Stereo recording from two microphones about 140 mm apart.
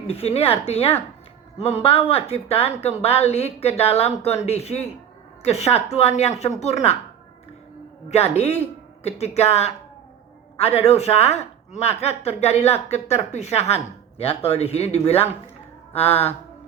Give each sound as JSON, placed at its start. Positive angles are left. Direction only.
{"t": 0.1, "sound": "speech", "side_deg": 45}
{"t": 8.1, "sound": "speech", "side_deg": 45}